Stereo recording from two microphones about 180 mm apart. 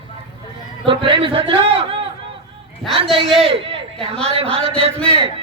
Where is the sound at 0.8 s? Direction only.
30° right (ahead or behind).